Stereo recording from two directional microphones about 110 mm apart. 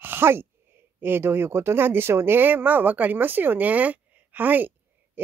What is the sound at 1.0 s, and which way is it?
Speech, 20° right (ahead or behind).